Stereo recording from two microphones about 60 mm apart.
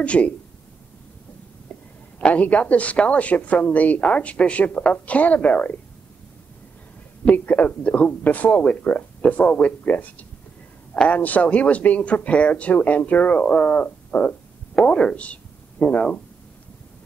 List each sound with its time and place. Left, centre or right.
0.0 s a woman's voice: left
2.1 s a woman's voice: left
7.2 s a woman's voice: left